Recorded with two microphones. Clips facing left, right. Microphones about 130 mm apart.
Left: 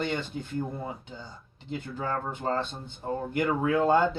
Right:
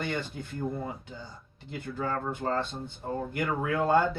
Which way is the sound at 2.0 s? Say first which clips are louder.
Right 1 dB; 20° left (ahead or behind).